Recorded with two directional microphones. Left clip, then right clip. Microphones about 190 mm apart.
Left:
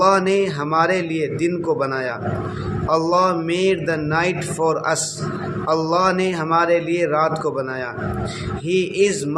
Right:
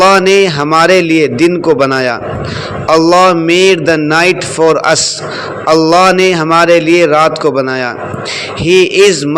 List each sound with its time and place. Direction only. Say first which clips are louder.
0.0 s a man's voice: right 10 dB; 30° right (ahead or behind)